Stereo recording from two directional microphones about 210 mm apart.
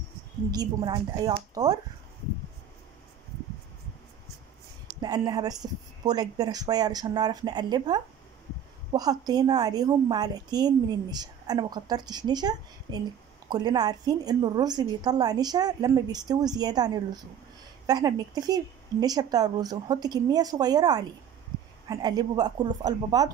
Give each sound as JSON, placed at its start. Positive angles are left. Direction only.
{"t": 0.5, "sound": "a woman's voice", "side_deg": -20}
{"t": 5.0, "sound": "a woman's voice", "side_deg": -20}